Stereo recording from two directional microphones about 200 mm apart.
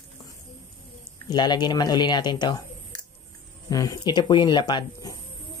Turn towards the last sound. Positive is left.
turn(degrees=20)  # may be behind; listen again after turning